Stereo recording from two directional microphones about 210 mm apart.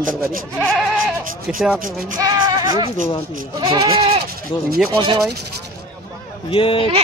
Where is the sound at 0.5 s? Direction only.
5° left (ahead or behind).